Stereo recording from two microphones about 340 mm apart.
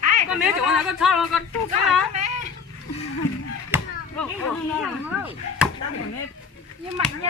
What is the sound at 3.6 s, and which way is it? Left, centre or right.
Chop, centre.